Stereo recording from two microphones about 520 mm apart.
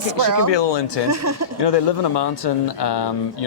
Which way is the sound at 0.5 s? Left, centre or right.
Left.